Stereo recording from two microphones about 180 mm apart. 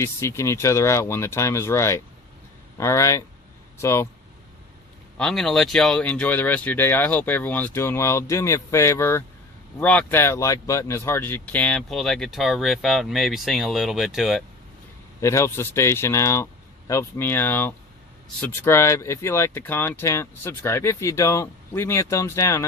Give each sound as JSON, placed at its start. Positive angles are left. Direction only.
{"t": 0.0, "sound": "speech", "side_deg": 15}
{"t": 5.1, "sound": "speech", "side_deg": 5}
{"t": 15.2, "sound": "speech", "side_deg": 15}